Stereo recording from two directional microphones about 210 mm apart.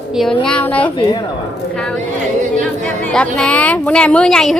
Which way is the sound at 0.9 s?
25° left (ahead or behind).